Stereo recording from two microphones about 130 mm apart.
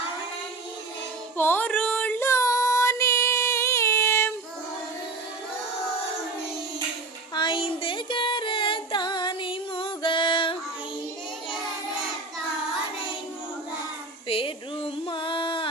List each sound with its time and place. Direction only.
1.4 s child singing: 15° left (ahead or behind)
7.3 s female singing: 40° left (ahead or behind)
14.3 s a sound: 45° left (ahead or behind)